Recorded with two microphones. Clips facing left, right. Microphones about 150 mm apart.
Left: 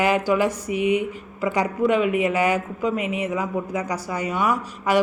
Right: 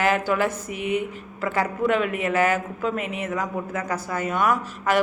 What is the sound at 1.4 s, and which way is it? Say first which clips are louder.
A man's voice: left 2 dB; 15° left (ahead or behind).